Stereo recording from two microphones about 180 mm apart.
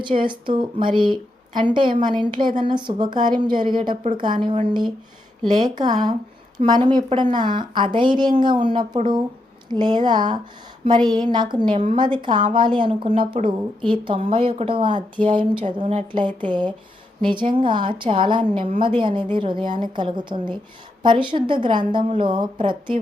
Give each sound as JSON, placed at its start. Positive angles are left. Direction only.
{"t": 0.2, "sound": "a woman's voice", "side_deg": -25}
{"t": 5.5, "sound": "a woman's voice", "side_deg": -25}